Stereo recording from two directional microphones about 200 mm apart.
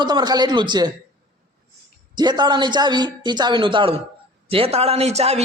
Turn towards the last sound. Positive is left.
turn(degrees=-30)  # may be behind; listen again after turning